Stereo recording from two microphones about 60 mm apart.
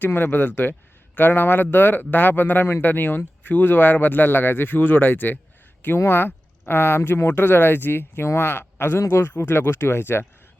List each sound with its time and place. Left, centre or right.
0.0 s a man's voice: left